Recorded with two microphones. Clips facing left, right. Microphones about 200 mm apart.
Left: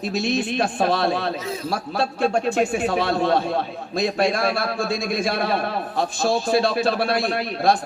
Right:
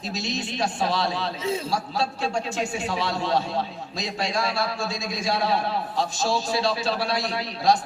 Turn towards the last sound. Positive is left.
turn(degrees=55)  # may be behind; listen again after turning